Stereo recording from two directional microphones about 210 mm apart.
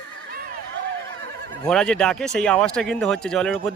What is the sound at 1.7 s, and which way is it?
Speech, 5° left (ahead or behind).